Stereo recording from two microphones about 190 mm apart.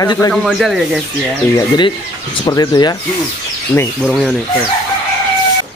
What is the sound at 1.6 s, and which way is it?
Speech, 25° left (ahead or behind).